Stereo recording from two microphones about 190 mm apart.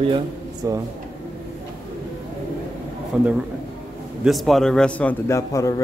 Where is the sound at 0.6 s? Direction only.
15° right (ahead or behind).